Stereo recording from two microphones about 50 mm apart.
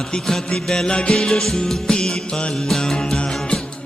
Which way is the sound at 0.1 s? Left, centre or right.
Centre.